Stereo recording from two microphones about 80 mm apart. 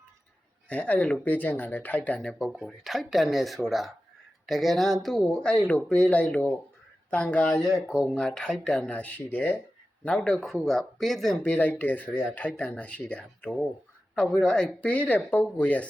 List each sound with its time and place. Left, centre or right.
0.7 s speech: centre
2.4 s speech: centre
5.6 s speech: centre